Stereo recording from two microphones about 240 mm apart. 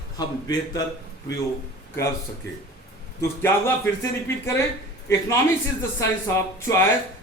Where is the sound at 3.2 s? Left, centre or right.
Centre.